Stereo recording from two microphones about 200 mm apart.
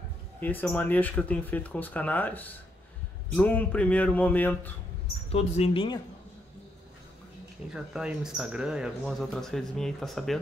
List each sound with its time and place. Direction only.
0.4 s speech: 10° left (ahead or behind)
5.3 s speech: 30° left (ahead or behind)
7.7 s speech: 5° right (ahead or behind)